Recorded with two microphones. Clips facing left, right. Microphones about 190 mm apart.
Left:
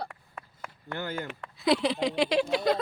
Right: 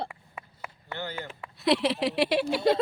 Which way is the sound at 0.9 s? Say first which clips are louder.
Left 2 dB; 50° left (ahead or behind).